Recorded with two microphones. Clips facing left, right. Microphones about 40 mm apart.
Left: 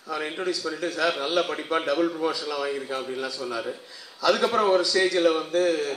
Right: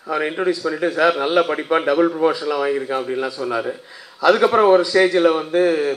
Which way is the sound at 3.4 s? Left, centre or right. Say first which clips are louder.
Right 8 dB; right.